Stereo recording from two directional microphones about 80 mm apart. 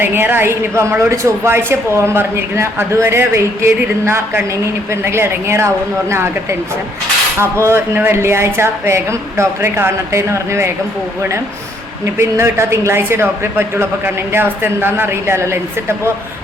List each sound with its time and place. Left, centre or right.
0.0 s a woman's voice: right
12.1 s a woman's voice: right